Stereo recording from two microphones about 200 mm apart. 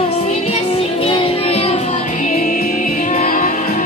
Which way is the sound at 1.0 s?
30° left (ahead or behind).